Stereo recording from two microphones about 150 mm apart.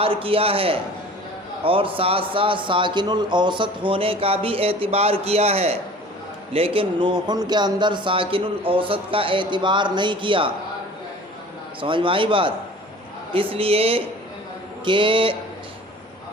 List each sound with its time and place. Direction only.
0.0 s a man's voice: 35° right (ahead or behind)
11.8 s a man's voice: 35° right (ahead or behind)